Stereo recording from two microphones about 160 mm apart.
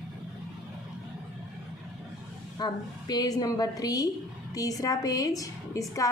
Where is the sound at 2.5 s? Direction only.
25° left (ahead or behind).